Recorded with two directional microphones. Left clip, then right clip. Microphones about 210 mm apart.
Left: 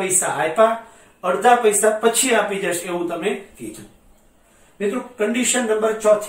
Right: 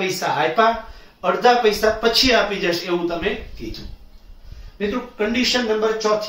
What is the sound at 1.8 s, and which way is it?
Speech, 15° right (ahead or behind).